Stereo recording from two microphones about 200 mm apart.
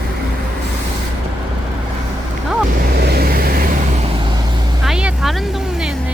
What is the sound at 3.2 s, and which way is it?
Vehicle, 45° right (ahead or behind).